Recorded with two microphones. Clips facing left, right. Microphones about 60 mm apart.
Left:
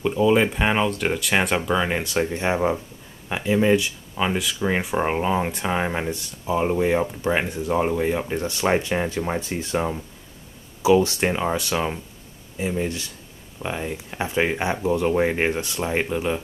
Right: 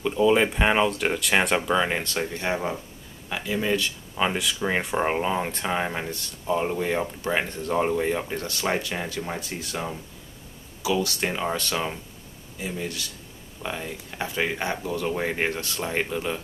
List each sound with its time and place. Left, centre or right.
0.0 s speech: centre
4.2 s speech: centre
8.5 s speech: left
11.4 s speech: centre
12.5 s speech: left